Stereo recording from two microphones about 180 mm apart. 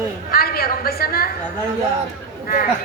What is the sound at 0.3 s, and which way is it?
A woman's voice, 55° left (ahead or behind).